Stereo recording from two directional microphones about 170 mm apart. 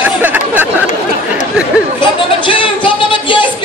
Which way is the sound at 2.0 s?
30° left (ahead or behind).